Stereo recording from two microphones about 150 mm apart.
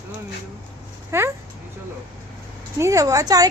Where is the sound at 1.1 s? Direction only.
15° right (ahead or behind).